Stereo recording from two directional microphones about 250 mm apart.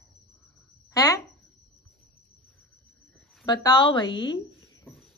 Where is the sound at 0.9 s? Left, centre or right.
Centre.